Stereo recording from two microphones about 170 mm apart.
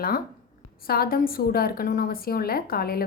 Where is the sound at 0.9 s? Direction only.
60° left (ahead or behind).